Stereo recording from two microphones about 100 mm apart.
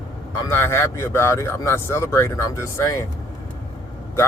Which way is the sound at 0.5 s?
25° left (ahead or behind).